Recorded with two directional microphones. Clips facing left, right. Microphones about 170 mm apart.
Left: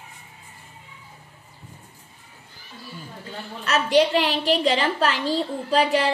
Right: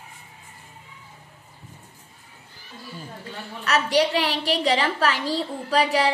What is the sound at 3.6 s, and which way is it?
A woman's voice, 25° left (ahead or behind).